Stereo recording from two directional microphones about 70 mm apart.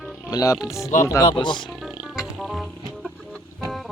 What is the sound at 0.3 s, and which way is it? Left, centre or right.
Speech, left.